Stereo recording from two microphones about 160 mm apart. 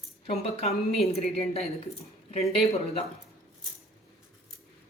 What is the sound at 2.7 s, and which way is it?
Speech, 40° left (ahead or behind).